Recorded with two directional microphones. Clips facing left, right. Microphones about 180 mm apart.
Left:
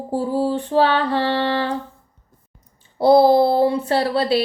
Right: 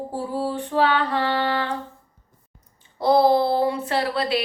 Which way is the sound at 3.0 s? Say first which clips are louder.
Left 5 dB; 30° left (ahead or behind).